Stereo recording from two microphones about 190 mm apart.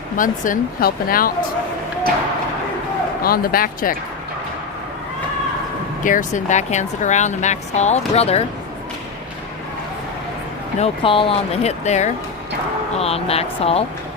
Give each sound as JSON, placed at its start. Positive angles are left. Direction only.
{"t": 0.2, "sound": "speech", "side_deg": 45}
{"t": 3.2, "sound": "speech", "side_deg": 50}
{"t": 6.1, "sound": "a woman's voice", "side_deg": 40}
{"t": 10.8, "sound": "a woman's voice", "side_deg": 30}